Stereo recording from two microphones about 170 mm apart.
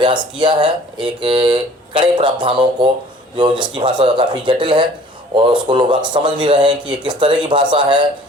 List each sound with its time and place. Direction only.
0.0 s speech: 25° right (ahead or behind)